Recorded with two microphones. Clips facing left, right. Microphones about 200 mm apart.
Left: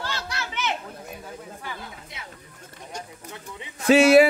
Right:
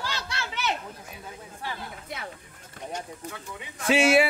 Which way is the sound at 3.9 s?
40° left (ahead or behind).